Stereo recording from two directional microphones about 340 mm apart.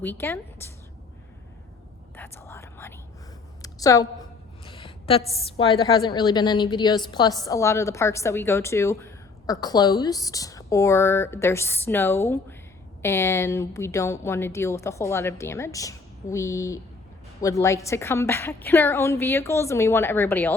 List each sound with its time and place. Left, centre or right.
0.0 s a woman's voice: centre
2.1 s whispering: centre
3.6 s a sound: centre
5.5 s a woman's voice: centre